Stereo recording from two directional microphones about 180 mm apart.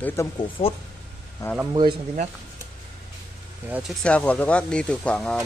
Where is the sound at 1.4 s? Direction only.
15° left (ahead or behind).